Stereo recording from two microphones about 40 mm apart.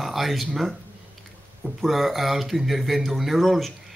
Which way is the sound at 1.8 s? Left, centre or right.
Centre.